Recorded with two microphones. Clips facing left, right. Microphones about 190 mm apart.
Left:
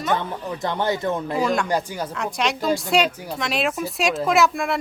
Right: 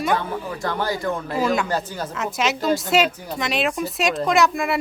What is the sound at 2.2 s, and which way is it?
A man's voice, 5° right (ahead or behind).